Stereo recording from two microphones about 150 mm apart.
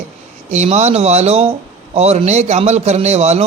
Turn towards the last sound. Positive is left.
turn(degrees=-45)  # may be behind; listen again after turning